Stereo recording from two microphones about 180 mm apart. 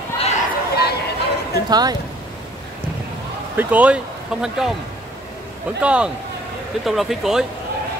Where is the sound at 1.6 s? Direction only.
20° right (ahead or behind).